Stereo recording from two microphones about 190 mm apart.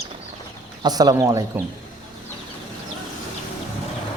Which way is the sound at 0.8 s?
20° right (ahead or behind).